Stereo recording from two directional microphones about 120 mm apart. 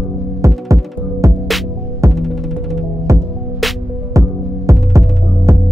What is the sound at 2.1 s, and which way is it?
Music, centre (ahead or behind).